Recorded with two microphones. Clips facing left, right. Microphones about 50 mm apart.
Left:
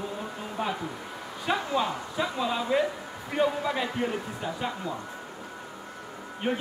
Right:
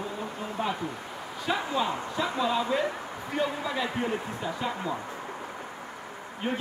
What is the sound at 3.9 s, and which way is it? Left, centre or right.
Speech, centre.